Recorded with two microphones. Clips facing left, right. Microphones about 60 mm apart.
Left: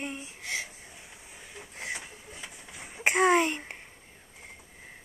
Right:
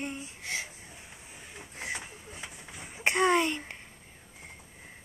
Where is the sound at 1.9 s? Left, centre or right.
Right.